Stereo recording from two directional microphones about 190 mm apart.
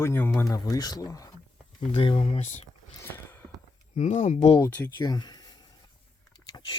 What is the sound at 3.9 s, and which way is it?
Speech, 35° left (ahead or behind).